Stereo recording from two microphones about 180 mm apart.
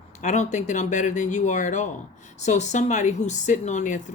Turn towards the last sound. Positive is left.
turn(degrees=45)  # may be behind; listen again after turning